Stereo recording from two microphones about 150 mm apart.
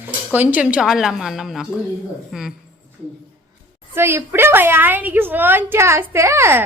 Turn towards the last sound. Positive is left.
turn(degrees=-15)  # may be behind; listen again after turning